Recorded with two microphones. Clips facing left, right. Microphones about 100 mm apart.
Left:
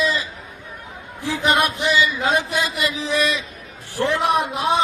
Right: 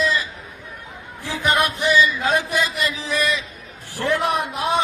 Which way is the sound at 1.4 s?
20° left (ahead or behind).